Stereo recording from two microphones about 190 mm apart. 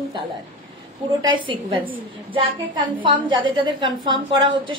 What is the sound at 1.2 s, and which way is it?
A woman's voice, 25° right (ahead or behind).